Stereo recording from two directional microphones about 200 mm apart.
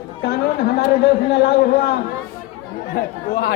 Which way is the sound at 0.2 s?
55° left (ahead or behind).